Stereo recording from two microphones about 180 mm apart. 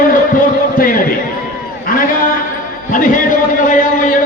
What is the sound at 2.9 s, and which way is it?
Music, 45° left (ahead or behind).